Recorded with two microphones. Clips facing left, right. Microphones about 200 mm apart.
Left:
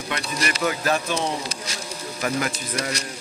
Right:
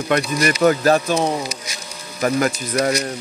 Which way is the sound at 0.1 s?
50° right (ahead or behind).